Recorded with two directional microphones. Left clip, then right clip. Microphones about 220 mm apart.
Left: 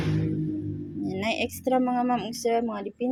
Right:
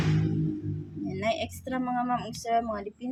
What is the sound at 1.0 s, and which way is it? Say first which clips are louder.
Speech: left 1 dB; 20° left (ahead or behind).